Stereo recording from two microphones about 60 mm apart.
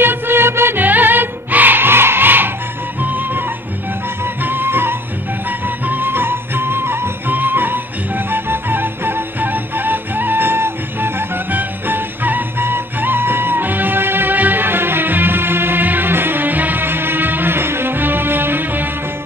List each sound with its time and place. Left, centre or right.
0.0 s music: right